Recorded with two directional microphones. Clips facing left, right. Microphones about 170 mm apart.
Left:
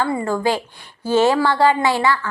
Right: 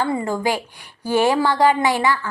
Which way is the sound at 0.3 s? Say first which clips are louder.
Left 2 dB; 15° right (ahead or behind).